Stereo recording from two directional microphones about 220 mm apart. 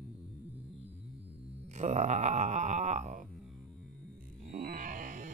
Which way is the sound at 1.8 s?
30° right (ahead or behind).